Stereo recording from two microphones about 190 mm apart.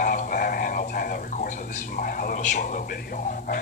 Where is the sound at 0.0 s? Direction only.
45° left (ahead or behind).